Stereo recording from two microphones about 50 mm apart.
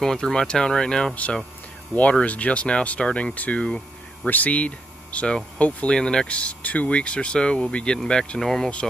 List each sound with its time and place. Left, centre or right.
0.0 s speech: centre
2.0 s speech: left
3.6 s a sound: centre
4.3 s speech: left
5.9 s speech: centre